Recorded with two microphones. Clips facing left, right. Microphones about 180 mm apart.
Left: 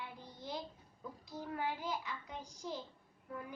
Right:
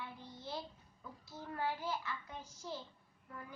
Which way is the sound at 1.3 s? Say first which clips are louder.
Even; 15° left (ahead or behind).